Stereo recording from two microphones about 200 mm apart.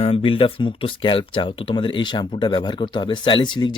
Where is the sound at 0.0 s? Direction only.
30° left (ahead or behind).